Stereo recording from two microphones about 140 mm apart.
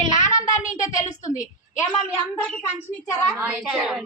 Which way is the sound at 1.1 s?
65° left (ahead or behind).